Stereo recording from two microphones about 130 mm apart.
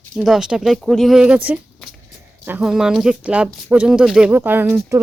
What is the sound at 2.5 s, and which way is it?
Speech, 10° right (ahead or behind).